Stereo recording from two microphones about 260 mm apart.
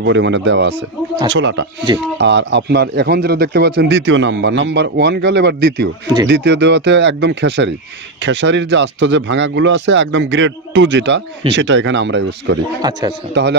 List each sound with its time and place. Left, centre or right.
0.0 s speech: right
12.8 s speech: centre
13.3 s speech: right